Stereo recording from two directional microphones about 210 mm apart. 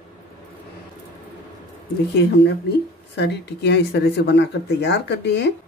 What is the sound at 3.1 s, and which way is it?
Speech, 55° left (ahead or behind).